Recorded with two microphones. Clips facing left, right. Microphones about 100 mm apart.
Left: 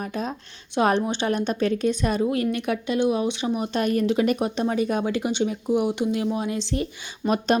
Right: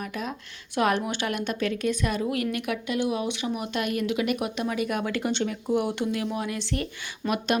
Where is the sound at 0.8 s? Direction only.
30° left (ahead or behind).